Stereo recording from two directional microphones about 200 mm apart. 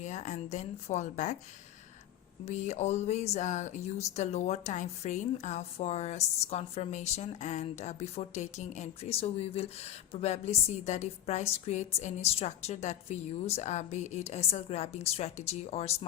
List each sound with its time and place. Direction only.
0.0 s speech: 35° left (ahead or behind)
2.4 s speech: 35° left (ahead or behind)